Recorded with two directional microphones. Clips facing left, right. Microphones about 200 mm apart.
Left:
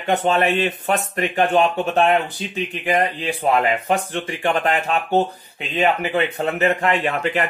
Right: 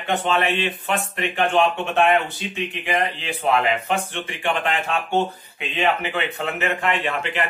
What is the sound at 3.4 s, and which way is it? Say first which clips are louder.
A man's voice: left 2 dB; 40° left (ahead or behind).